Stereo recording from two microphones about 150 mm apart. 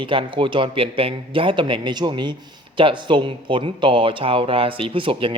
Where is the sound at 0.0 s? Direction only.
35° right (ahead or behind).